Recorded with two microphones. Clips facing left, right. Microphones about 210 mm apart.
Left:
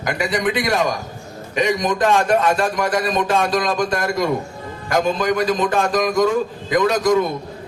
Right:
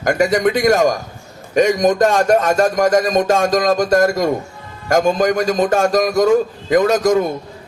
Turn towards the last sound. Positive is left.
turn(degrees=-45)  # may be behind; listen again after turning